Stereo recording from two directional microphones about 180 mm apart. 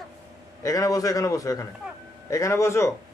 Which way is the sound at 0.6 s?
20° left (ahead or behind).